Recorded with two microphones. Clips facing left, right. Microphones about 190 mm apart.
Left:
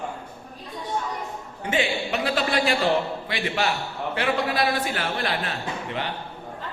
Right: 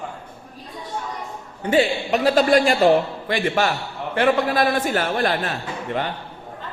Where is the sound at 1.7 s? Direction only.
40° right (ahead or behind).